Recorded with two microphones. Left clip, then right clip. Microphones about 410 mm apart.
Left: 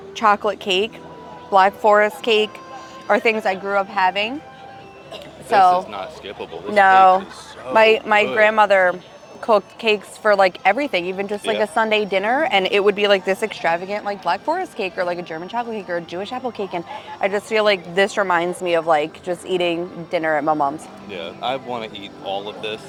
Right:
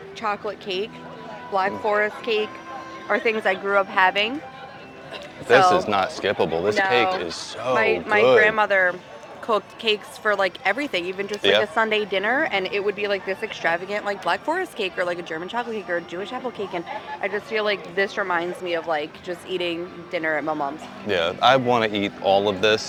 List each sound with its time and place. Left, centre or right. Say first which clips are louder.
0.2 s speech: left 10 dB; left
3.4 s speech: left 1 dB; centre
5.5 s speech: left 2 dB; centre
5.8 s speech: right 8 dB; right
6.7 s speech: left 12 dB; left
13.6 s speech: left 3 dB; left
21.1 s speech: right 8 dB; right